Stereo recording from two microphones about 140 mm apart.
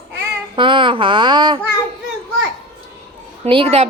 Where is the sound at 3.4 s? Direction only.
45° right (ahead or behind).